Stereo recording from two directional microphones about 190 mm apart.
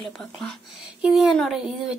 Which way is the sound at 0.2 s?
5° left (ahead or behind).